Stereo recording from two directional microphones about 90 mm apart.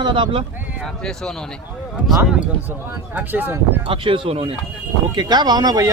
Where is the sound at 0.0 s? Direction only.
65° right (ahead or behind).